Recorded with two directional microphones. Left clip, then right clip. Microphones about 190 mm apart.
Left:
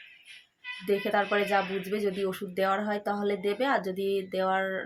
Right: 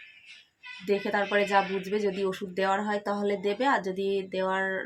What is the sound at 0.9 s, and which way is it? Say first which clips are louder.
Speech: even; centre (ahead or behind).